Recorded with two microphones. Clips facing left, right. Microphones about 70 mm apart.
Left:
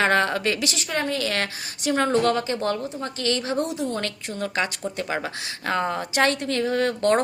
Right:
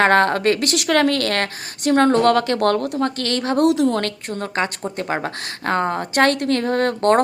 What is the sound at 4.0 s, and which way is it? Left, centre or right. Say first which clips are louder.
Speech: right 4 dB; right.